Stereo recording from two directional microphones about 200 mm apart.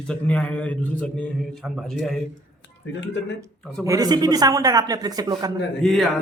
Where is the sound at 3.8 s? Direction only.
15° right (ahead or behind).